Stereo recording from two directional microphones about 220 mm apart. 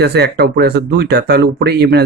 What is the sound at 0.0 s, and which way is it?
Speech, 50° right (ahead or behind).